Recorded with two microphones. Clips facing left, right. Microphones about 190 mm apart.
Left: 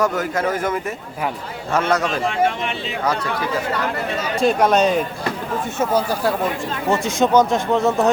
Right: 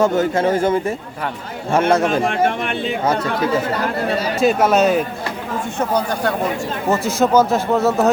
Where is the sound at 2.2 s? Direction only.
55° right (ahead or behind).